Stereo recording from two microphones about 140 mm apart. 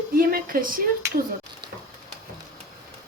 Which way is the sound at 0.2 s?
90° right.